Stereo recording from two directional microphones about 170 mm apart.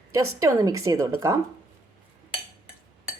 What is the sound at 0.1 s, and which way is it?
A woman's voice, 20° right (ahead or behind).